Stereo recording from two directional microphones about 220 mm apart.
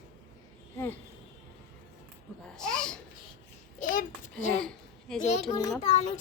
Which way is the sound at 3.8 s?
35° left (ahead or behind).